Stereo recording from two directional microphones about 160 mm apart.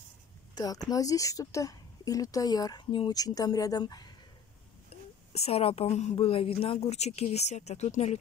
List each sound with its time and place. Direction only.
0.6 s a woman's voice: 25° left (ahead or behind)
4.8 s a woman's voice: 40° left (ahead or behind)